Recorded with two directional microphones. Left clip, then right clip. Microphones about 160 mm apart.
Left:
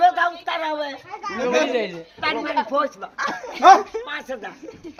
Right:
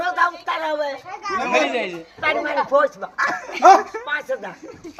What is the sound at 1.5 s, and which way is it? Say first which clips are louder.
Speech: right 1 dB; 40° left (ahead or behind).